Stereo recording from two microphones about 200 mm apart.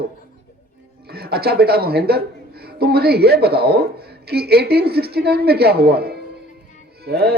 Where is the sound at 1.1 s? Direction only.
50° right (ahead or behind).